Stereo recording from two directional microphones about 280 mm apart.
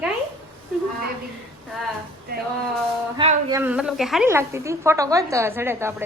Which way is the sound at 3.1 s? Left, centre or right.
Centre.